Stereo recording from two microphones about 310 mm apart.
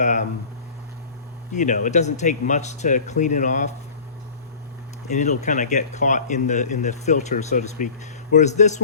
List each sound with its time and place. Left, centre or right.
0.0 s speech: left
1.5 s speech: left
5.0 s speech: left